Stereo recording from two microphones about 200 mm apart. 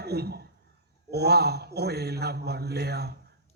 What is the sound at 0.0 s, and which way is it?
A man's voice, 55° right (ahead or behind).